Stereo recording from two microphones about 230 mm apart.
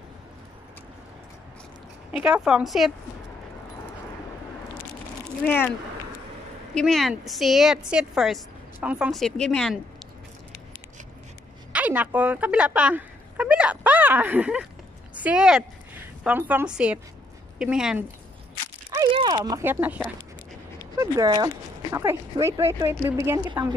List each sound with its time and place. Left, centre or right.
2.0 s a woman's voice: centre
5.4 s speech: centre
6.7 s a woman's voice: centre
11.7 s a woman's voice: centre
18.9 s a woman's voice: centre